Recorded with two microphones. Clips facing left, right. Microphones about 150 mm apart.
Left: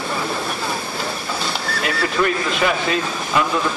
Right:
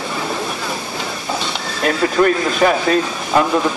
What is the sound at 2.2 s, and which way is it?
Speech, 40° right (ahead or behind).